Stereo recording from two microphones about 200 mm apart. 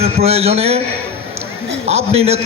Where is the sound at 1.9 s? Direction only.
30° right (ahead or behind).